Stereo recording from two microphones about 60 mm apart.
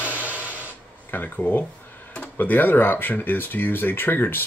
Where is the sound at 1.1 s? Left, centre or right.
Left.